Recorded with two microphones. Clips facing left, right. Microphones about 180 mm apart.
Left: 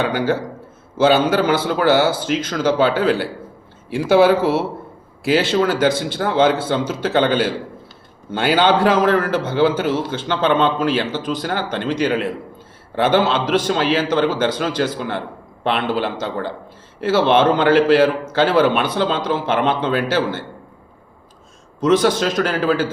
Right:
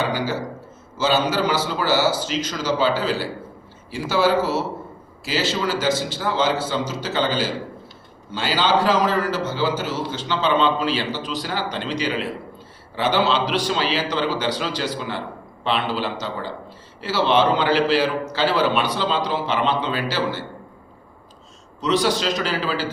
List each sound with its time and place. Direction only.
0.0 s a man's voice: 55° left (ahead or behind)
21.8 s a man's voice: 50° left (ahead or behind)